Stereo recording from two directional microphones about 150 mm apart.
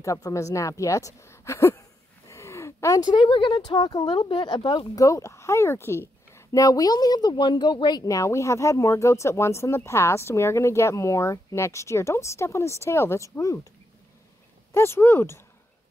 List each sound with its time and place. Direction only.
0.0 s speech: 20° left (ahead or behind)
14.7 s speech: 15° left (ahead or behind)